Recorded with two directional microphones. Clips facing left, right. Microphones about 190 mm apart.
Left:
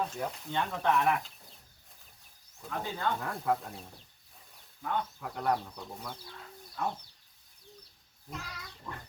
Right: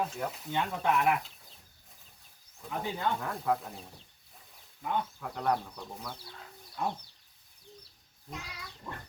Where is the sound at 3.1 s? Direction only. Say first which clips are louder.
Even; centre (ahead or behind).